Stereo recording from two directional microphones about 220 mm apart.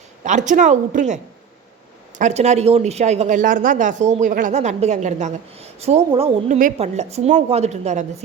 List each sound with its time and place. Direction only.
0.3 s speech: 35° right (ahead or behind)